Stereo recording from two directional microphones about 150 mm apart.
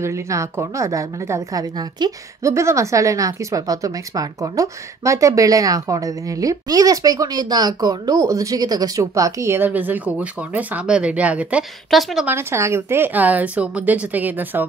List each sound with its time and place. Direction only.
0.0 s a woman's voice: 20° right (ahead or behind); by 12.3 s centre (ahead or behind)
12.3 s a woman's voice: 15° right (ahead or behind)